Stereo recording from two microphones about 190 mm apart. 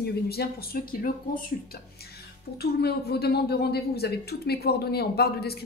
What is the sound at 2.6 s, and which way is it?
A woman's voice, 55° left (ahead or behind).